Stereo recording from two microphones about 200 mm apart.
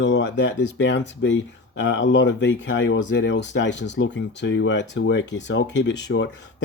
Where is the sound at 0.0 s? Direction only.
60° left (ahead or behind).